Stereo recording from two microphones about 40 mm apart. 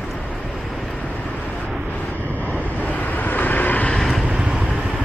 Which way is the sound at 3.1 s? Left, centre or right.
Left.